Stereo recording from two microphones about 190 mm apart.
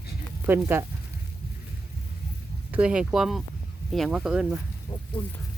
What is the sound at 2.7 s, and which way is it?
Speech, 5° right (ahead or behind).